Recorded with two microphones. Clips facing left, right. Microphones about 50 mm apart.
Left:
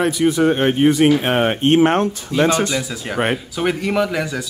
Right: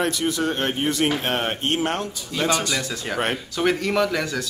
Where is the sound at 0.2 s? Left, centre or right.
Left.